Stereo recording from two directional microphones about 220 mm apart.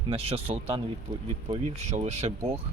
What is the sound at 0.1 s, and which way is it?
Speech, 25° right (ahead or behind).